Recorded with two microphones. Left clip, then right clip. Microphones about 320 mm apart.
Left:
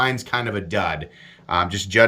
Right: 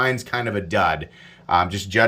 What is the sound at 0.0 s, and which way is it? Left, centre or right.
Speech, centre.